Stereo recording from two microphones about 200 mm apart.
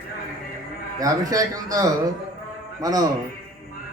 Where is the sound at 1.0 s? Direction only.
15° right (ahead or behind).